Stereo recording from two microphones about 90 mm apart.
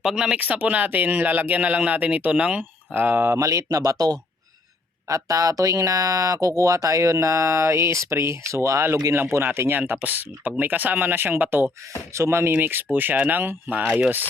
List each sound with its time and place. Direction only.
0.0 s speech: 5° right (ahead or behind)